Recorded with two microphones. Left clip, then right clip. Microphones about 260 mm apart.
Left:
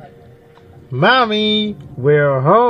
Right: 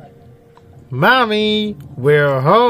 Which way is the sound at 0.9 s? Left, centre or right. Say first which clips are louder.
Even; centre.